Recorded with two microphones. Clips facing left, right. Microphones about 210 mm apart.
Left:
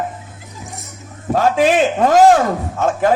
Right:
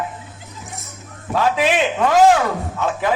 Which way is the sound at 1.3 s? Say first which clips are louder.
Left 4 dB; 45° left (ahead or behind).